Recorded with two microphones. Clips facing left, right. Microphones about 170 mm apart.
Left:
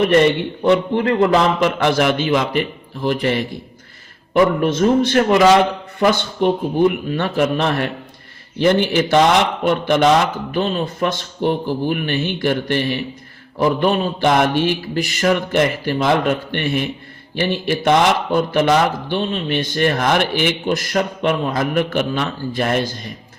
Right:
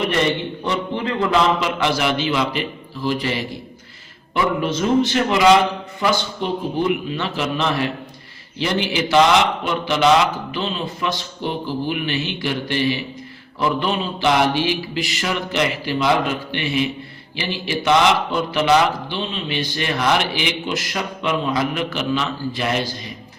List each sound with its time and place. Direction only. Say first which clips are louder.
0.6 s a man's voice: left 11 dB; 55° left (ahead or behind)
1.3 s mantra: left 3 dB; 50° left (ahead or behind)